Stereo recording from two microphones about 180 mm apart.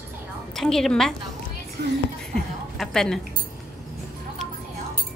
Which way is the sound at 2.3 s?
5° left (ahead or behind).